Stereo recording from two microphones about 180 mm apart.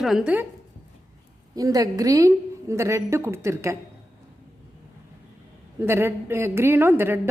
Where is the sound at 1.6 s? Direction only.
20° right (ahead or behind).